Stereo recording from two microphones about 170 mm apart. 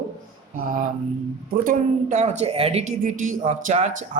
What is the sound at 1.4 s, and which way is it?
Speech, 50° right (ahead or behind).